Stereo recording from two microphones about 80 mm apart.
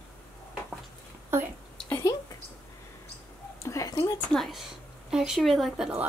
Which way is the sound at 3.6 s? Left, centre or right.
Left.